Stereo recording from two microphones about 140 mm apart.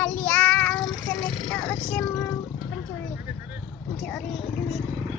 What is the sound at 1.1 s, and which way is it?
Vehicle, 10° left (ahead or behind).